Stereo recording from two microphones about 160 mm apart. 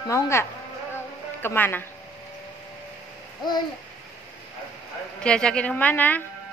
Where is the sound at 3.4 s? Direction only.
30° left (ahead or behind).